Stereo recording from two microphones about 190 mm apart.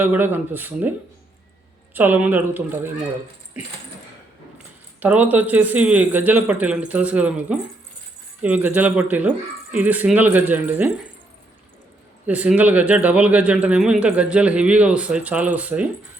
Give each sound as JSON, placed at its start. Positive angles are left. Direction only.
{"t": 0.0, "sound": "speech", "side_deg": -10}
{"t": 12.2, "sound": "speech", "side_deg": -10}